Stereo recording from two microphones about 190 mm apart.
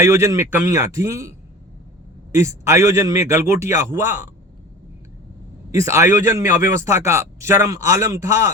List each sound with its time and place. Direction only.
0.0 s speech: 15° right (ahead or behind)
2.3 s speech: 15° right (ahead or behind)
5.7 s speech: 15° right (ahead or behind)